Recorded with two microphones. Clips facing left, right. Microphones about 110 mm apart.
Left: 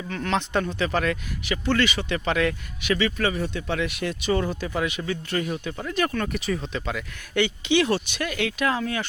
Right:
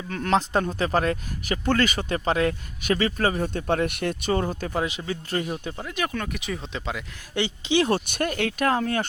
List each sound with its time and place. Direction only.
0.1 s speech: 35° right (ahead or behind)
4.9 s speech: 30° right (ahead or behind)
5.7 s speech: 15° right (ahead or behind)
6.6 s speech: 20° right (ahead or behind)
7.9 s speech: 50° right (ahead or behind)